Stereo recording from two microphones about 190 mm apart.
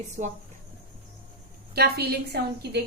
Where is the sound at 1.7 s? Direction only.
55° right (ahead or behind).